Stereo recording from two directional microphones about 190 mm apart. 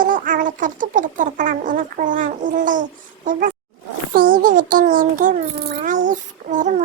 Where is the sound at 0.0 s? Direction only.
45° right (ahead or behind).